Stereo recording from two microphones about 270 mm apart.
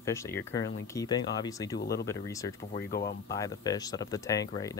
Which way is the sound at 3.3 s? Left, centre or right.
Centre.